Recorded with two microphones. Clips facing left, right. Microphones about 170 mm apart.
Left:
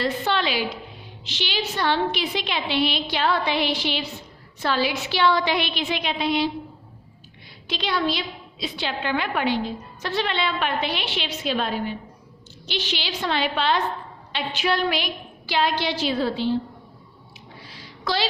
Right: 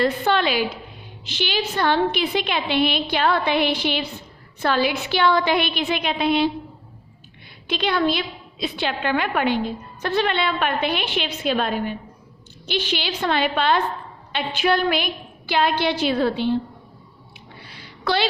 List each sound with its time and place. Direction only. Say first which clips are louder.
0.0 s a woman's voice: right 4 dB; 50° right (ahead or behind)
7.7 s a woman's voice: right 4 dB; 55° right (ahead or behind)
17.6 s a sound: right 2 dB; 65° right (ahead or behind)